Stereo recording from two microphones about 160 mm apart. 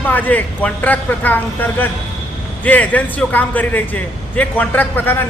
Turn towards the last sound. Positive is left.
turn(degrees=10)  # may be behind; listen again after turning